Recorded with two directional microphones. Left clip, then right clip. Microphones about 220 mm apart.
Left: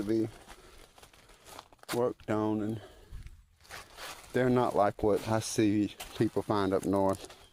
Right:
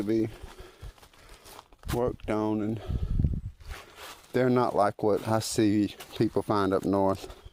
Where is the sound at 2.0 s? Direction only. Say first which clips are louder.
Right 2 dB; 25° right (ahead or behind).